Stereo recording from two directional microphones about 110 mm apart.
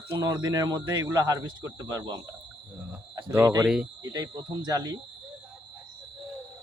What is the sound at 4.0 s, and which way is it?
Speech, 30° right (ahead or behind).